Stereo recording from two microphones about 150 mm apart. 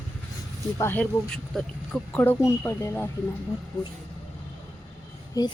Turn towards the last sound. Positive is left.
turn(degrees=25)  # may be behind; listen again after turning